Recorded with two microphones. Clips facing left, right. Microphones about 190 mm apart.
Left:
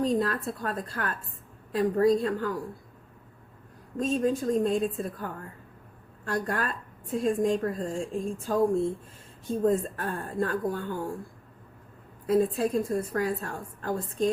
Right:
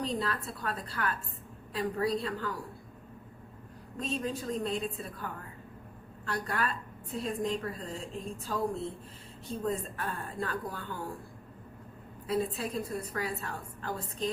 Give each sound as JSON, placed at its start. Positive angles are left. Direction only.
{"t": 0.0, "sound": "a woman's voice", "side_deg": 45}
{"t": 3.9, "sound": "a woman's voice", "side_deg": 45}
{"t": 12.3, "sound": "a woman's voice", "side_deg": 50}